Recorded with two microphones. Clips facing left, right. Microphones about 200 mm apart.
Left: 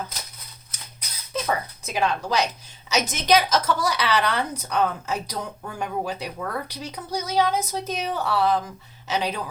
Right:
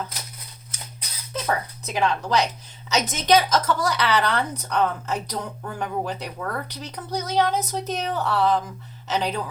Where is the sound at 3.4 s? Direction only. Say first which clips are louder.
Right 1 dB; 5° left (ahead or behind).